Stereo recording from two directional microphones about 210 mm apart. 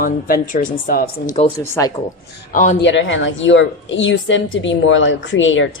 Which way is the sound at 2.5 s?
35° left (ahead or behind).